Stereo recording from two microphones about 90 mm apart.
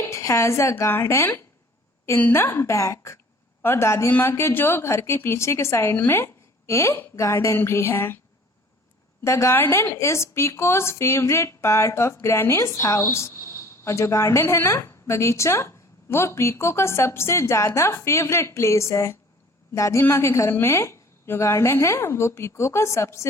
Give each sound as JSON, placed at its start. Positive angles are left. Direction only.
{"t": 0.0, "sound": "a woman's voice", "side_deg": 35}
{"t": 9.2, "sound": "a woman's voice", "side_deg": 35}